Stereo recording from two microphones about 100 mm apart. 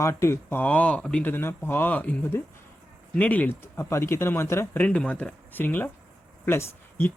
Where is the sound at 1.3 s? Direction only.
25° left (ahead or behind).